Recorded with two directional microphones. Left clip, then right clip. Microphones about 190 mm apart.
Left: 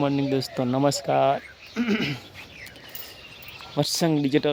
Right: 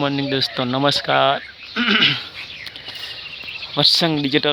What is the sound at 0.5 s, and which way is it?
Speech, 10° right (ahead or behind).